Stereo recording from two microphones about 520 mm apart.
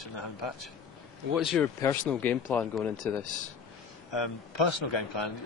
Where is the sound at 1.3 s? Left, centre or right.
Centre.